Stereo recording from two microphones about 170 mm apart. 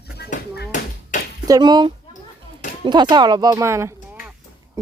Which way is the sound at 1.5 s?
25° right (ahead or behind).